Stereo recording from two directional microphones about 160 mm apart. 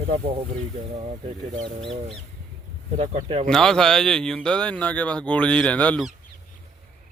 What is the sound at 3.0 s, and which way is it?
Speech, 40° right (ahead or behind).